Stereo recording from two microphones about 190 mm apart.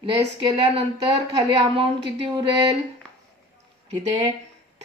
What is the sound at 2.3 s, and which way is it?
Speech, 25° right (ahead or behind).